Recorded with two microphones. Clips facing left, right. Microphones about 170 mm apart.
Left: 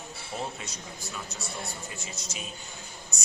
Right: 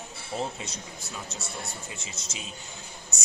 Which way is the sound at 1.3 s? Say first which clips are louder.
Even; 25° right (ahead or behind).